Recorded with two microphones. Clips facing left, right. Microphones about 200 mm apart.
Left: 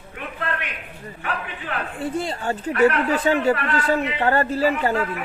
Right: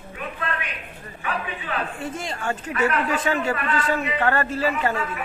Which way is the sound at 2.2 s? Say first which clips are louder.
Left 4 dB; 35° left (ahead or behind).